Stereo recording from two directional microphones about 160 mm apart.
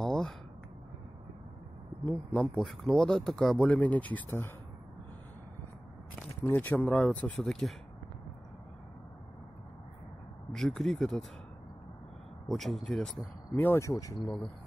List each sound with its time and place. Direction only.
0.0 s a sound: 5° left (ahead or behind)
2.0 s speech: 5° left (ahead or behind)
6.4 s speech: 10° left (ahead or behind)
10.5 s speech: 5° left (ahead or behind)
12.4 s speech: centre (ahead or behind); by 14.3 s 20° left (ahead or behind)